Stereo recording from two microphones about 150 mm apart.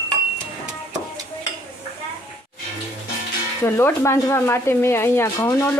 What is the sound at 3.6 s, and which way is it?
Speech, 15° left (ahead or behind).